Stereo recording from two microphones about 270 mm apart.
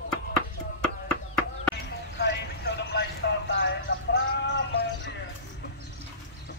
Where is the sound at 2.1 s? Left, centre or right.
Left.